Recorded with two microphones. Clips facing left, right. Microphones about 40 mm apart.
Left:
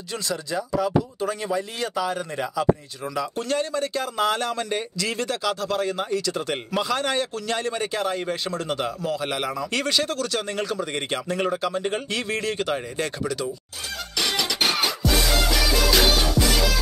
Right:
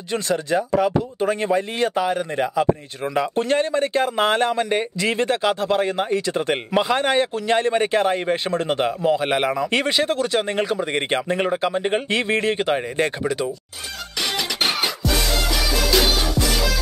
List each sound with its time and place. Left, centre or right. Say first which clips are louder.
0.1 s speech: right 7 dB; right
15.9 s music: right 2 dB; centre